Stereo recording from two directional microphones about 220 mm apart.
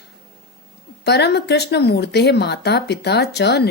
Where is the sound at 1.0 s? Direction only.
50° left (ahead or behind).